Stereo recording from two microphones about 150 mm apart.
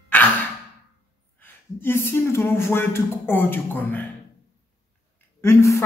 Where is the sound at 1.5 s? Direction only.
15° left (ahead or behind).